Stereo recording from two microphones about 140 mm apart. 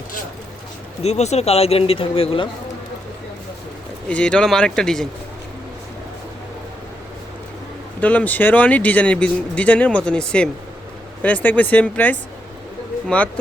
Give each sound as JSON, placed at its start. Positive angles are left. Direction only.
{"t": 1.0, "sound": "speech", "side_deg": 50}
{"t": 4.1, "sound": "speech", "side_deg": 5}
{"t": 8.0, "sound": "speech", "side_deg": 10}